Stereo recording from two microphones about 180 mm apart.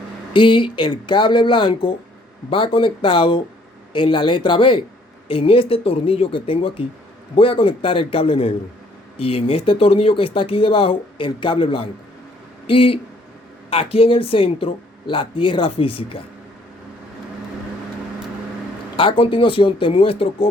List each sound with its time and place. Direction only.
0.3 s speech: 25° left (ahead or behind)
18.9 s speech: 30° left (ahead or behind)